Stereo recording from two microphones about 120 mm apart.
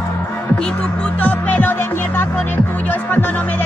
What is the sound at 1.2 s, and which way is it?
Music, 15° left (ahead or behind).